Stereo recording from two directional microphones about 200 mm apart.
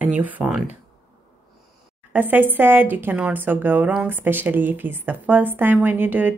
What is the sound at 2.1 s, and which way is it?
A woman's voice, 10° right (ahead or behind).